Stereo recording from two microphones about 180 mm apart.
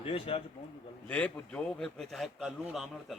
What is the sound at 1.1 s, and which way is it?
A man's voice, 5° left (ahead or behind).